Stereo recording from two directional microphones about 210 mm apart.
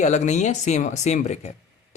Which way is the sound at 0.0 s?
35° left (ahead or behind).